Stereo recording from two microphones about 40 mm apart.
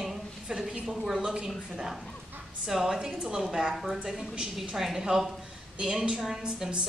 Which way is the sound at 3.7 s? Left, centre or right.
Centre.